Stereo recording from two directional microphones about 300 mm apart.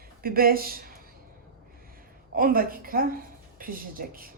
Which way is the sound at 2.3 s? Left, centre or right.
Right.